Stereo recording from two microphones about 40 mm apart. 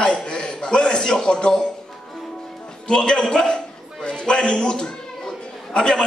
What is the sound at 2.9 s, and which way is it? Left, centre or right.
A man's voice, centre.